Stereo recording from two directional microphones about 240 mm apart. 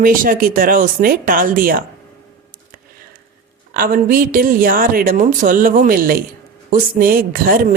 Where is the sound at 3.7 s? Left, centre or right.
Right.